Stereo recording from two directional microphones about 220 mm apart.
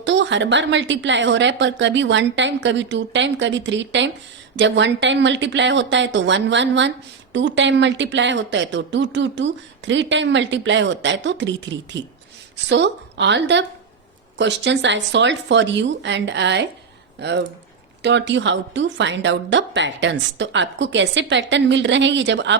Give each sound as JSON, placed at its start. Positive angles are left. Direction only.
{"t": 0.0, "sound": "speech", "side_deg": -55}